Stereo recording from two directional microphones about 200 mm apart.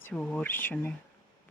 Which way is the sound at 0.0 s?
5° left (ahead or behind).